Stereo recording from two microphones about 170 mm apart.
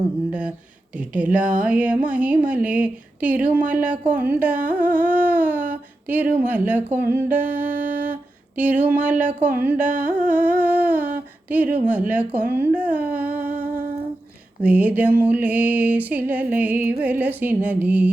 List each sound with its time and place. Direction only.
0.3 s a woman's voice: 5° right (ahead or behind)
13.5 s humming: 60° right (ahead or behind)
14.6 s a woman's voice: 10° right (ahead or behind)